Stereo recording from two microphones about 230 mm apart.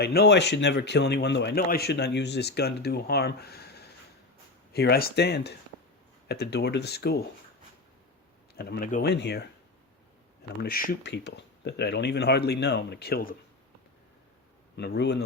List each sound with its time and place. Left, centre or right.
0.0 s a man's voice: left
8.5 s a man's voice: left
10.6 s a man's voice: left
14.8 s a man's voice: left